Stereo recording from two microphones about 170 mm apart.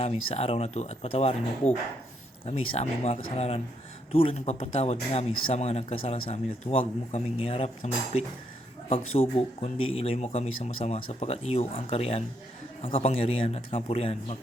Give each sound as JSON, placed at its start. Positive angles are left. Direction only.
{"t": 0.0, "sound": "speech", "side_deg": 35}
{"t": 8.9, "sound": "speech", "side_deg": 35}